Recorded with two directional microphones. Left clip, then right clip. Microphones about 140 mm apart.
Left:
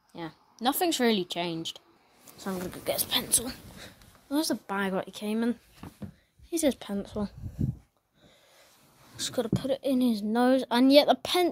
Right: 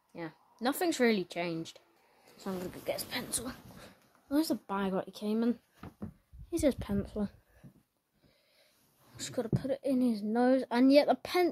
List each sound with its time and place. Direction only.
0.1 s speech: 5° right (ahead or behind)
2.8 s a woman's voice: 20° left (ahead or behind)
3.8 s speech: centre (ahead or behind)
9.1 s a woman's voice: 5° left (ahead or behind)